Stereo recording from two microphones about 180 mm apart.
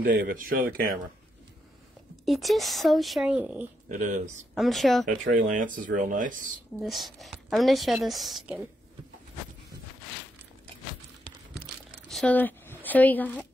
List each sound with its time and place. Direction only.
0.0 s speech: 55° right (ahead or behind)
2.2 s a woman's voice: centre (ahead or behind)
3.9 s speech: 45° right (ahead or behind)
4.6 s a woman's voice: centre (ahead or behind)
5.0 s speech: 45° right (ahead or behind)
6.8 s a woman's voice: centre (ahead or behind)
12.1 s speech: 5° left (ahead or behind)